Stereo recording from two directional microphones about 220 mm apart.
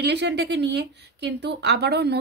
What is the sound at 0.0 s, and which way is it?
Speech, 50° right (ahead or behind).